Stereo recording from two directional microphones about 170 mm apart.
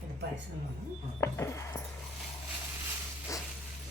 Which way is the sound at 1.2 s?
15° left (ahead or behind).